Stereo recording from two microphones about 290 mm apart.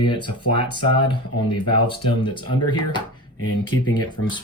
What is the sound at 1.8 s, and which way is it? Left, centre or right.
Speech, centre.